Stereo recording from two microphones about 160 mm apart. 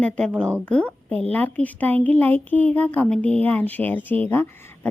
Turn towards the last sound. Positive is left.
turn(degrees=15)  # may be behind; listen again after turning